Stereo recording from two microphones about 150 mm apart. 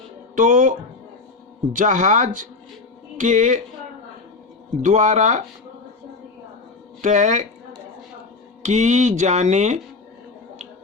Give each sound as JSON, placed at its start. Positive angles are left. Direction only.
{"t": 0.3, "sound": "speech", "side_deg": -60}
{"t": 1.7, "sound": "speech", "side_deg": -55}
{"t": 4.8, "sound": "speech", "side_deg": -55}
{"t": 7.0, "sound": "speech", "side_deg": -50}
{"t": 8.6, "sound": "speech", "side_deg": -50}